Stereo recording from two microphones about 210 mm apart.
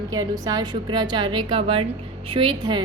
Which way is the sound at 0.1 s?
15° right (ahead or behind).